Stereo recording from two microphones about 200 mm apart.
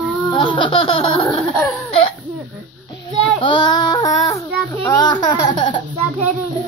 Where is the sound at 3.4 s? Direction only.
25° left (ahead or behind).